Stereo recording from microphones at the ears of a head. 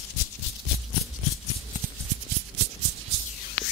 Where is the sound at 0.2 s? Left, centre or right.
Left.